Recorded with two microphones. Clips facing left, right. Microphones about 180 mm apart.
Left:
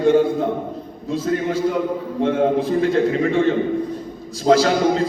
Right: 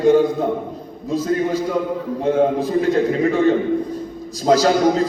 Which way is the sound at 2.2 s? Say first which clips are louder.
Right 1 dB; 40° right (ahead or behind).